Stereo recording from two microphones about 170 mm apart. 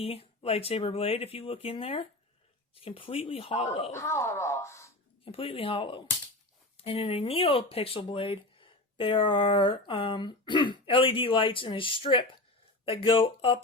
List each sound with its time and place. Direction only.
0.0 s speech: 35° left (ahead or behind)
3.9 s speech: 15° left (ahead or behind)
5.2 s speech: 35° left (ahead or behind)